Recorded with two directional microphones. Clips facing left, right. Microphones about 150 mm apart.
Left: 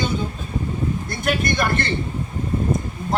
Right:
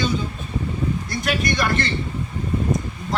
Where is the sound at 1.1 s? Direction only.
50° left (ahead or behind).